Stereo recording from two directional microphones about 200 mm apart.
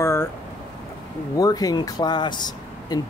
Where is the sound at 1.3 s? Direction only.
20° left (ahead or behind).